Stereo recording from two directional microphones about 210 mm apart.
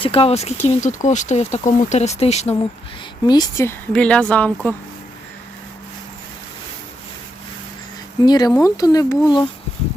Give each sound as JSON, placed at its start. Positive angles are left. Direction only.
{"t": 0.0, "sound": "speech", "side_deg": 25}
{"t": 3.2, "sound": "a woman's voice", "side_deg": 15}
{"t": 8.2, "sound": "speech", "side_deg": 20}